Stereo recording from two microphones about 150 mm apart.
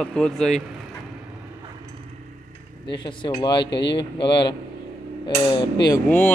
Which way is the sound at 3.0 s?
30° left (ahead or behind).